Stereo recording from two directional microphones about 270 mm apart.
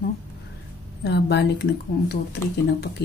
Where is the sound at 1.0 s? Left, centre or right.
Left.